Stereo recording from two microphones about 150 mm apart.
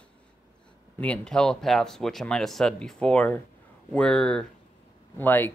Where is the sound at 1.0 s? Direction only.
5° left (ahead or behind).